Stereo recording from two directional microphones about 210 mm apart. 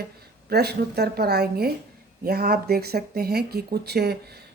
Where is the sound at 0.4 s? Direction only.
50° right (ahead or behind).